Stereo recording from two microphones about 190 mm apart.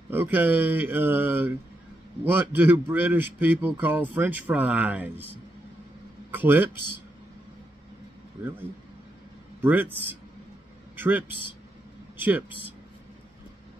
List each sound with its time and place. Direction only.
0.1 s a man's voice: 10° right (ahead or behind)
6.3 s a man's voice: 10° right (ahead or behind)
9.6 s a man's voice: 10° right (ahead or behind)
11.0 s a man's voice: 10° right (ahead or behind)
11.2 s a man's voice: 25° left (ahead or behind)
12.2 s a man's voice: 10° right (ahead or behind)